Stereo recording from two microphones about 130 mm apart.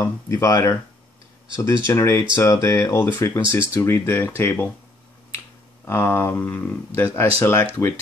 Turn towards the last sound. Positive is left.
turn(degrees=15)  # may be behind; listen again after turning